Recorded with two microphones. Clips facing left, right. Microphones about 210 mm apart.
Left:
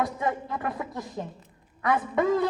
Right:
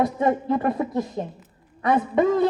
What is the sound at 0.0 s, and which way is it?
A woman's voice, 25° right (ahead or behind).